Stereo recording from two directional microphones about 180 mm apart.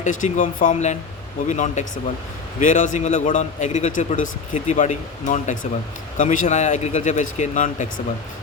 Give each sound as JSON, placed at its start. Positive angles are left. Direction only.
{"t": 0.0, "sound": "a man's voice", "side_deg": 45}